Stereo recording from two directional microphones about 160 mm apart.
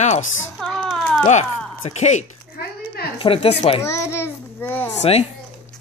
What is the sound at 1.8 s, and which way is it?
Speech, 45° left (ahead or behind).